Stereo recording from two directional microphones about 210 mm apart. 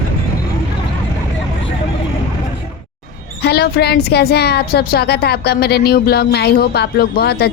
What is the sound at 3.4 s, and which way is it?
Speech, 50° left (ahead or behind).